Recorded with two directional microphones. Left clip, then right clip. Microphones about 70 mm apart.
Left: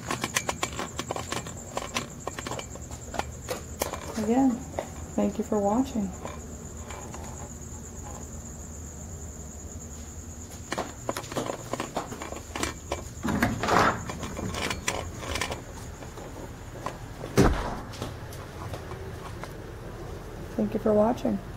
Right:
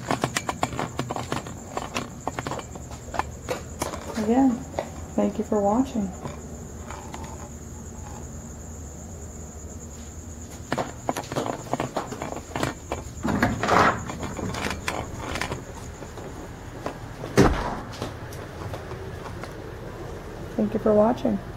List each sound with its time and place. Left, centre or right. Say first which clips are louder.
0.0 s horse: right 3 dB; centre
3.1 s a sound: right 4 dB; centre
10.7 s walk: right 4 dB; centre
17.2 s cupboard open or close: right 4 dB; centre
20.5 s speech: right 3 dB; centre